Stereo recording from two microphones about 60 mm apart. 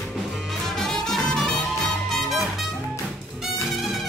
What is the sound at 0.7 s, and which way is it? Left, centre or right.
Music, centre.